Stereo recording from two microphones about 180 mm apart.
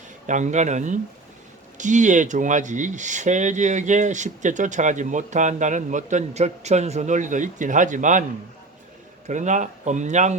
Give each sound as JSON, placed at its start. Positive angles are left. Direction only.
{"t": 0.3, "sound": "speech", "side_deg": -40}
{"t": 9.2, "sound": "speech", "side_deg": -40}